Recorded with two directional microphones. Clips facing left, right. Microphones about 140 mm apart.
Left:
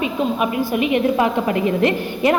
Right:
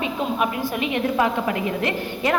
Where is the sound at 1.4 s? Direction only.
25° left (ahead or behind).